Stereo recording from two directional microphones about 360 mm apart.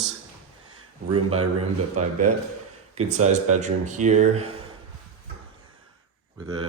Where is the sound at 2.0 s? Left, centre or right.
Right.